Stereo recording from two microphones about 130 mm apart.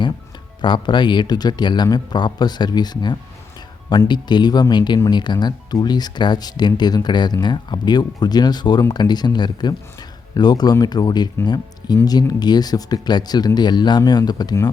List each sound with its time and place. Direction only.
0.6 s speech: 35° left (ahead or behind)